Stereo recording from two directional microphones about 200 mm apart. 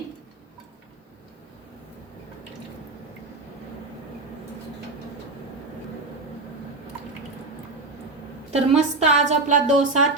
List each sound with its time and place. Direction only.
8.5 s a woman's voice: 35° right (ahead or behind)